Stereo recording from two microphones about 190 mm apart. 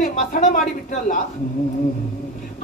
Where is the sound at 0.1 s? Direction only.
40° left (ahead or behind).